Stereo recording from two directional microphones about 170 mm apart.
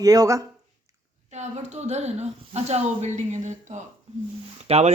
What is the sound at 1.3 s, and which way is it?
Speech, 40° right (ahead or behind).